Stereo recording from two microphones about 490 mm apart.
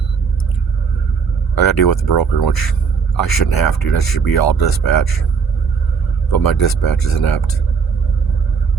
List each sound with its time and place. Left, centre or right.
1.5 s speech: left
6.3 s speech: left